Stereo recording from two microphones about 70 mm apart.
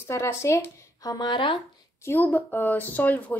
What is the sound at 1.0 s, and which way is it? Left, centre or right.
Speech, left.